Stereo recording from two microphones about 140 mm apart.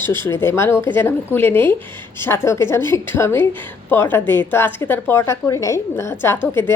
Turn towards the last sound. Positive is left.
turn(degrees=15)  # may be behind; listen again after turning